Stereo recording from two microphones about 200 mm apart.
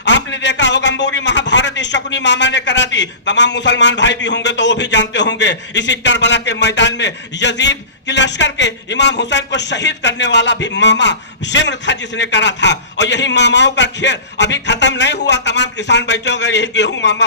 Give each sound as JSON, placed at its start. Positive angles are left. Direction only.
{"t": 0.0, "sound": "a man's voice", "side_deg": 60}